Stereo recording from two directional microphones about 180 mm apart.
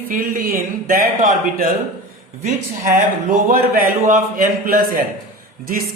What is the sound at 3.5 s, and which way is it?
Speech, 50° right (ahead or behind).